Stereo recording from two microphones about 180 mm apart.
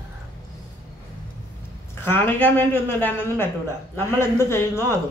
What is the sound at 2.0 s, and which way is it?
Speech, 10° left (ahead or behind).